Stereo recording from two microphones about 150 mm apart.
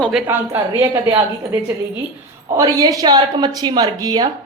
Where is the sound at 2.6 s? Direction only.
25° right (ahead or behind).